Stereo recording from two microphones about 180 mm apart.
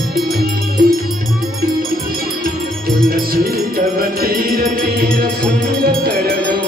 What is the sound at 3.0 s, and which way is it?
Music, 55° right (ahead or behind).